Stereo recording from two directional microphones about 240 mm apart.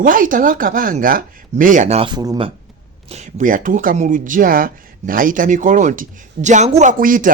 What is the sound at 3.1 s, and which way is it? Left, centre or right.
Speech, right.